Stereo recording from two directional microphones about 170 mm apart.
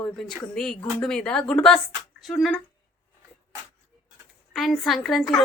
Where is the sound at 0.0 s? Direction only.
5° left (ahead or behind).